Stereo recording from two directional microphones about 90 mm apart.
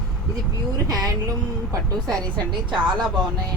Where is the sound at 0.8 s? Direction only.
40° right (ahead or behind).